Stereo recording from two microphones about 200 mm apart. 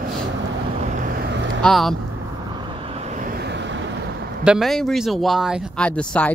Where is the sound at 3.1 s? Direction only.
45° right (ahead or behind).